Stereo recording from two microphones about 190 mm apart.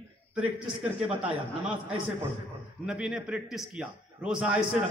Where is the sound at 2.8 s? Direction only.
5° right (ahead or behind).